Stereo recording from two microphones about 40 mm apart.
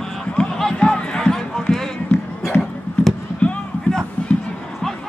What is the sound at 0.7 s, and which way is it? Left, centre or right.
Music, centre.